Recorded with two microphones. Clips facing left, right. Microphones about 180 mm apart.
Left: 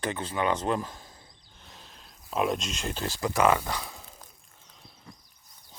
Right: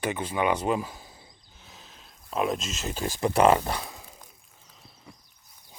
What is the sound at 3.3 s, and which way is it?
Speech, 30° right (ahead or behind).